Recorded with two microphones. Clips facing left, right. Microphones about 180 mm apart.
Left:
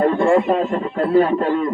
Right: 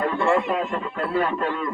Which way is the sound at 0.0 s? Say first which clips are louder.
Left 6 dB; 30° left (ahead or behind).